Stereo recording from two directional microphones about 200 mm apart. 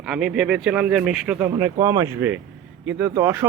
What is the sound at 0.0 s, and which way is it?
A man's voice, 5° right (ahead or behind).